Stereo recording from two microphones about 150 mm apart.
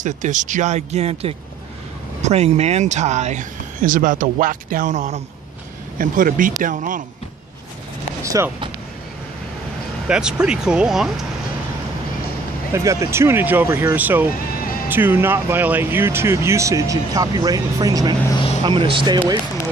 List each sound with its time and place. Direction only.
0.0 s speech: 55° right (ahead or behind)
5.9 s speech: 65° right (ahead or behind)
8.2 s speech: 20° right (ahead or behind)
10.0 s speech: 5° right (ahead or behind)
12.7 s speech: 20° right (ahead or behind)